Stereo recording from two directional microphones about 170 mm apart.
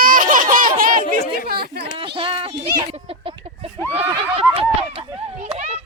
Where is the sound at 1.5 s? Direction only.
65° right (ahead or behind).